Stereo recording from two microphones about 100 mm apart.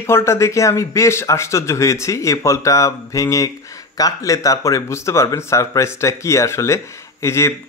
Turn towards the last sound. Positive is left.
turn(degrees=30)  # may be behind; listen again after turning